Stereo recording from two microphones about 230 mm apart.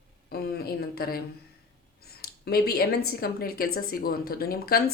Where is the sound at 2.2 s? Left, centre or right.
Left.